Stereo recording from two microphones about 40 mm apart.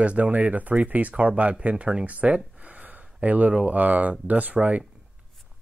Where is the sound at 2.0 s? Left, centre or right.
Right.